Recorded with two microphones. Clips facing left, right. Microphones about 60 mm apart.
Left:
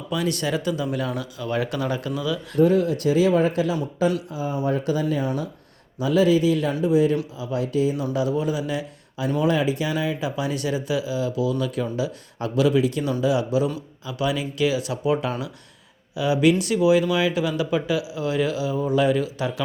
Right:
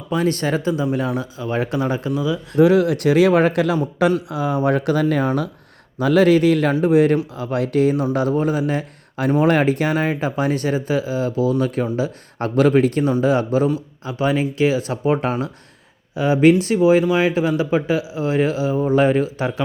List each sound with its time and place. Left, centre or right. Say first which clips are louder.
0.1 s speech: right 5 dB; right
2.6 s speech: right 5 dB; right
8.1 s speech: right 4 dB; right